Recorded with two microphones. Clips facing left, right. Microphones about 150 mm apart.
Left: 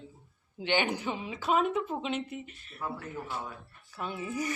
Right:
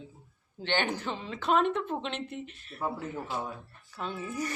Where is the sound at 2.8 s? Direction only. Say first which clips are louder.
Right 4 dB; 30° right (ahead or behind).